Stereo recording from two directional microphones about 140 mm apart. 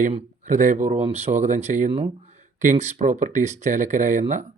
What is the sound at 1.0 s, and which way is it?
Speech, 50° right (ahead or behind).